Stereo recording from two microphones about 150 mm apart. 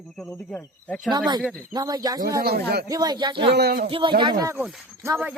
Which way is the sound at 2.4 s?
90° right.